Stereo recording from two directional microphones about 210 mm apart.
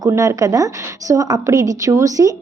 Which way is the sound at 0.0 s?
15° right (ahead or behind).